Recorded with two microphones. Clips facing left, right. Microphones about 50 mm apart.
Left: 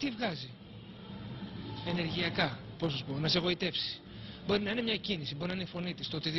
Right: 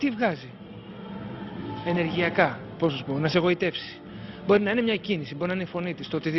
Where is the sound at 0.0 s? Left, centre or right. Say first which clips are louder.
Right 10 dB; right.